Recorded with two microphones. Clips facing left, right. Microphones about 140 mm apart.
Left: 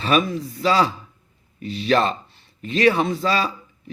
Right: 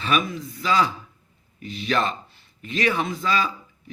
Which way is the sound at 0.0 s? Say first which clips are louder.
Left 4 dB; 35° left (ahead or behind).